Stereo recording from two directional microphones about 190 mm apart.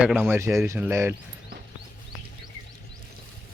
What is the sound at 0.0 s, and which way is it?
Speech, 5° right (ahead or behind).